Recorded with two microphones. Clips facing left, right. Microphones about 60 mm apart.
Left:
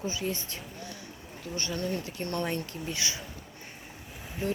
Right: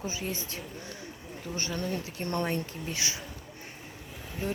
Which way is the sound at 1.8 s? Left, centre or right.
Right.